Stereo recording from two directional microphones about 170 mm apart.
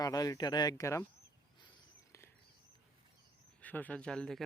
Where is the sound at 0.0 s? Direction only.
20° left (ahead or behind).